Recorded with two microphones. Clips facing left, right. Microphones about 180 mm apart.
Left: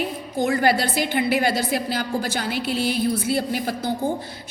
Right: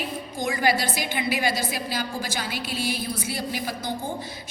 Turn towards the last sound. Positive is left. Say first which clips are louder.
# left 5 dB
turn(degrees=55)  # may be behind; listen again after turning